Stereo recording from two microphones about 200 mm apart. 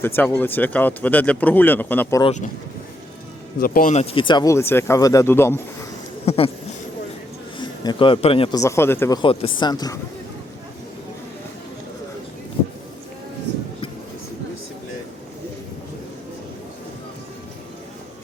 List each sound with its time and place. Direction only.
0.0 s speech: 10° left (ahead or behind)
2.2 s speech: 35° left (ahead or behind)
3.6 s speech: 40° left (ahead or behind); by 5.5 s 10° left (ahead or behind)
6.2 s speech: 30° left (ahead or behind)
7.6 s a man's voice: 25° left (ahead or behind)
8.6 s speech: 15° left (ahead or behind)